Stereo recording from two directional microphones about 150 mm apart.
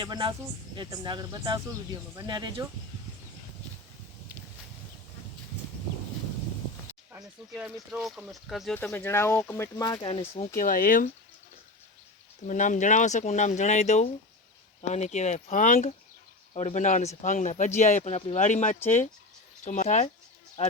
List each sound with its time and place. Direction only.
0.0 s speech: 30° right (ahead or behind)
7.2 s speech: 5° right (ahead or behind)
8.7 s speech: 10° left (ahead or behind)
10.1 s speech: 40° left (ahead or behind)
10.6 s speech: 65° left (ahead or behind)
12.5 s speech: 55° left (ahead or behind)